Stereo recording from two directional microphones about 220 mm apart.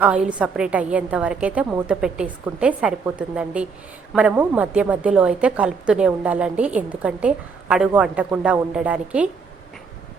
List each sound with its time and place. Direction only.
0.0 s a woman's voice: 5° right (ahead or behind)